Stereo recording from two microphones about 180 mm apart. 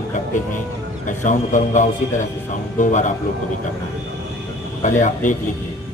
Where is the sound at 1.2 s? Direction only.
45° left (ahead or behind).